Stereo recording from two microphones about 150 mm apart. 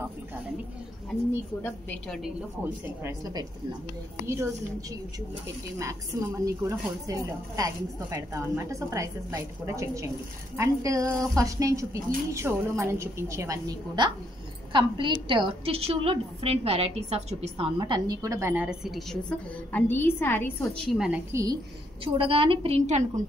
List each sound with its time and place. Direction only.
1.6 s a woman's voice: 10° left (ahead or behind)
2.2 s a woman's voice: 15° right (ahead or behind)
5.8 s a woman's voice: 20° right (ahead or behind); by 20.5 s 15° left (ahead or behind)
20.6 s a woman's voice: 5° left (ahead or behind)
21.3 s a woman's voice: 20° right (ahead or behind)
22.0 s a woman's voice: 35° right (ahead or behind)